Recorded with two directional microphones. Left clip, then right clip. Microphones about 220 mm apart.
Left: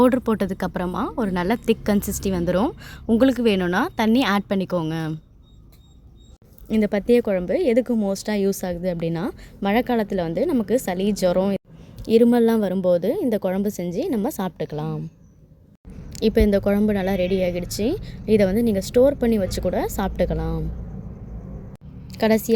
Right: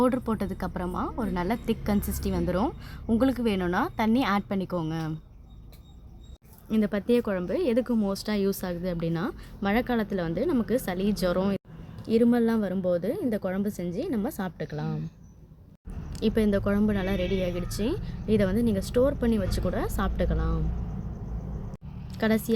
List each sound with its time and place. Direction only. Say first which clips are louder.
0.0 s speech: left 7 dB; 30° left (ahead or behind)
6.7 s speech: left 7 dB; 25° left (ahead or behind)
16.1 s speech: left 7 dB; 25° left (ahead or behind)
22.0 s a woman's voice: left 7 dB; 25° left (ahead or behind)